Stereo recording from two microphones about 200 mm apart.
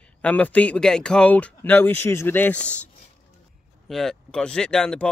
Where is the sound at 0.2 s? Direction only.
5° left (ahead or behind).